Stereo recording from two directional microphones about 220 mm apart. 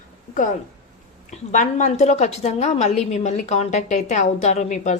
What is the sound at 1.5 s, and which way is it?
A woman's voice, 35° left (ahead or behind).